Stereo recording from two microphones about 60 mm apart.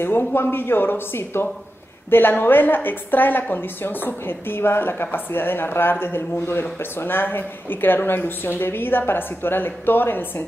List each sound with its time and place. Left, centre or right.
0.0 s a woman's voice: left